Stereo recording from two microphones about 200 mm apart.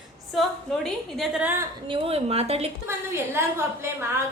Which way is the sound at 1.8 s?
25° right (ahead or behind).